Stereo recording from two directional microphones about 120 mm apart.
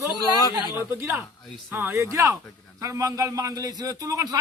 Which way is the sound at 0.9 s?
20° right (ahead or behind).